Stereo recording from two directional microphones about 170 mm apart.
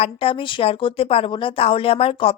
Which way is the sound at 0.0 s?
35° left (ahead or behind).